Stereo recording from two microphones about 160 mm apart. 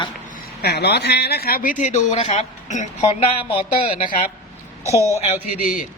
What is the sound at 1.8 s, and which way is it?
A man's voice, 45° left (ahead or behind).